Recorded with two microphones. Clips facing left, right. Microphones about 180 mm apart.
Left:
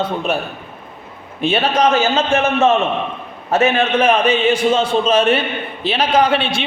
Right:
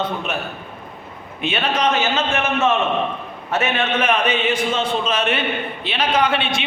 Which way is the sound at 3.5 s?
35° left (ahead or behind).